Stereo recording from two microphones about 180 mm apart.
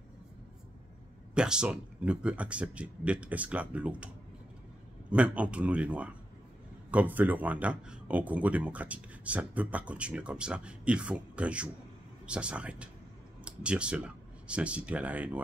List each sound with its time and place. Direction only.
1.3 s speech: 5° right (ahead or behind)
5.1 s speech: 5° right (ahead or behind)